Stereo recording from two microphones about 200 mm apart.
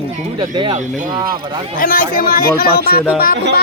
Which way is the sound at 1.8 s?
45° left (ahead or behind).